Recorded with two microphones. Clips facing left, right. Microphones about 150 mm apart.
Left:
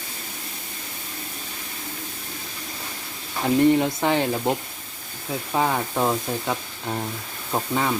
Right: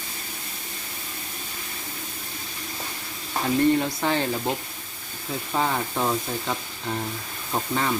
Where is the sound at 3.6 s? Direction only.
15° left (ahead or behind).